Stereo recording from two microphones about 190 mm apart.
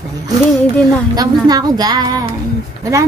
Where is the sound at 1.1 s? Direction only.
20° right (ahead or behind).